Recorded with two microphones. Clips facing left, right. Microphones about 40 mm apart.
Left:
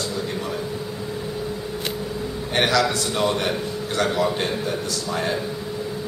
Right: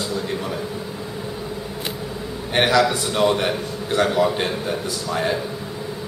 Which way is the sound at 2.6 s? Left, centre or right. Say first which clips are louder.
Right 3 dB; centre.